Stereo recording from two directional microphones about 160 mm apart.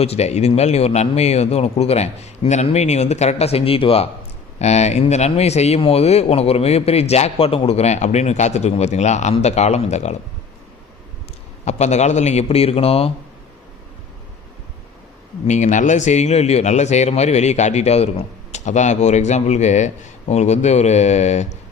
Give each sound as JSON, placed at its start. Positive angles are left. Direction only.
{"t": 0.0, "sound": "speech", "side_deg": 40}
{"t": 11.6, "sound": "speech", "side_deg": 45}
{"t": 15.4, "sound": "speech", "side_deg": 50}